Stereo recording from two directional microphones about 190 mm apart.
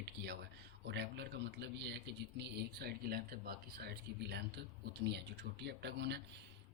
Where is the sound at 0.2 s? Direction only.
60° right (ahead or behind).